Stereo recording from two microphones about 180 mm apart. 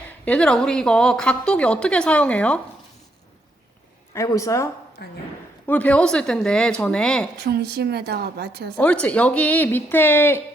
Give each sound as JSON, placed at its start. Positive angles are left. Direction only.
{"t": 0.3, "sound": "a woman's voice", "side_deg": 5}
{"t": 4.1, "sound": "speech", "side_deg": 15}
{"t": 5.0, "sound": "speech", "side_deg": 65}
{"t": 5.6, "sound": "a woman's voice", "side_deg": 10}
{"t": 7.3, "sound": "a woman's voice", "side_deg": -65}
{"t": 8.8, "sound": "speech", "side_deg": 5}